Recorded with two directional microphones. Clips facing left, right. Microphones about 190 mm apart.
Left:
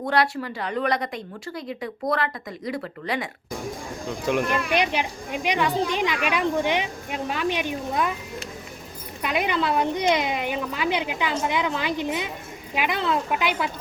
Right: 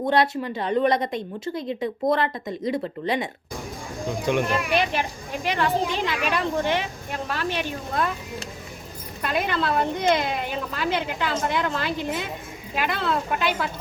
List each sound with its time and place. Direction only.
0.1 s a woman's voice: 20° right (ahead or behind)
4.3 s speech: centre (ahead or behind)
4.7 s speech: 20° left (ahead or behind)
9.2 s speech: 15° left (ahead or behind)